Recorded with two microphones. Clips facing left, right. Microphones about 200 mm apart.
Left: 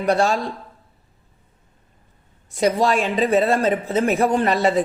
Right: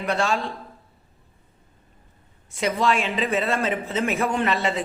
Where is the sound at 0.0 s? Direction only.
40° left (ahead or behind).